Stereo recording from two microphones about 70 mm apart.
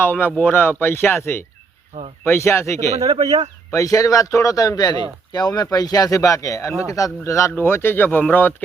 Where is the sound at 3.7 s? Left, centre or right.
Left.